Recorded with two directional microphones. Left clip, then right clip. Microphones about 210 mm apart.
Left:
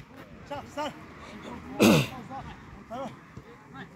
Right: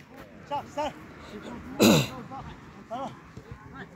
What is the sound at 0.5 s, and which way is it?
Speech, 55° left (ahead or behind).